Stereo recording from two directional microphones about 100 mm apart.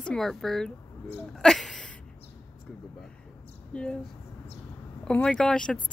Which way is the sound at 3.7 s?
10° left (ahead or behind).